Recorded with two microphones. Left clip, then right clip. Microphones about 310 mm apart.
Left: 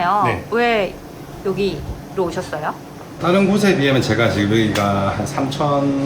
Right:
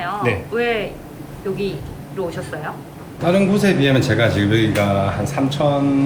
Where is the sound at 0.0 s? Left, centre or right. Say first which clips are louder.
Left 5 dB; centre.